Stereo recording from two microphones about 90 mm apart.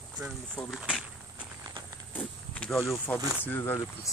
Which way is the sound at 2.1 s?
15° left (ahead or behind).